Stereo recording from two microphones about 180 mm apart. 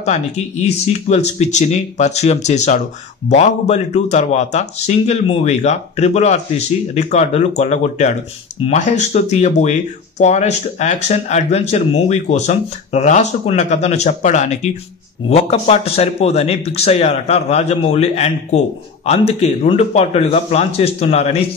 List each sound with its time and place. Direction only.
0.0 s speech: 35° left (ahead or behind)